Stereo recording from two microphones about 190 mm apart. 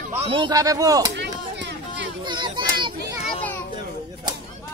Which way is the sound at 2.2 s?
25° right (ahead or behind).